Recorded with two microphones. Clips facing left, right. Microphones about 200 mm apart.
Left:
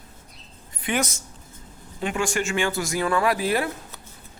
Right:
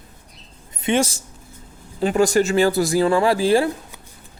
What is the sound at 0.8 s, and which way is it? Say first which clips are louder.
Speech: right 6 dB; 25° right (ahead or behind).